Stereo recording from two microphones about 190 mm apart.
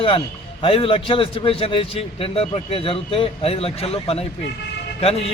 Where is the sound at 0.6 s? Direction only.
30° left (ahead or behind).